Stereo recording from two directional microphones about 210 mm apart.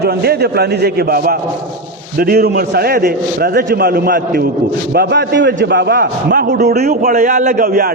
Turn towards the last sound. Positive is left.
turn(degrees=-45)  # may be behind; listen again after turning